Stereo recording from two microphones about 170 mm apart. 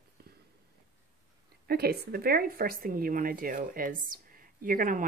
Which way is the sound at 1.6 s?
70° right (ahead or behind).